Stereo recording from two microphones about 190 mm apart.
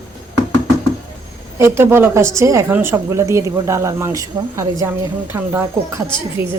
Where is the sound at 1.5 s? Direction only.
15° right (ahead or behind).